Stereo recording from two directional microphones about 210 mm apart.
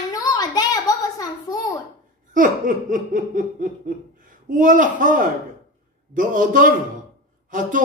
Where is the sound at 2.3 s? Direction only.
40° right (ahead or behind).